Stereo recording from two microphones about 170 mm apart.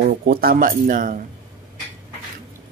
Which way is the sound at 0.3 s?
60° right (ahead or behind).